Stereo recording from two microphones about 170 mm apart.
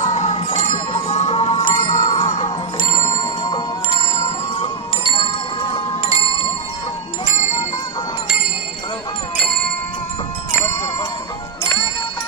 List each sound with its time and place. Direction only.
0.0 s music: 40° left (ahead or behind)
4.6 s wind chime: 30° left (ahead or behind)
10.6 s music: 25° left (ahead or behind)